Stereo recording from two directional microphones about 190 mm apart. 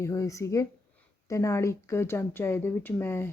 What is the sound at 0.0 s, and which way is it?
Speech, 15° left (ahead or behind).